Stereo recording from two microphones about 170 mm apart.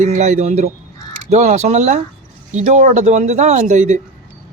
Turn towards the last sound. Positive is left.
turn(degrees=-45)  # may be behind; listen again after turning